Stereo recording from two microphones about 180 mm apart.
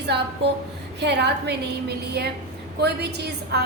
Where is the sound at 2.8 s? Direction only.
70° right (ahead or behind).